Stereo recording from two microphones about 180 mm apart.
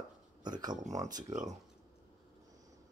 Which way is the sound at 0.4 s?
25° right (ahead or behind).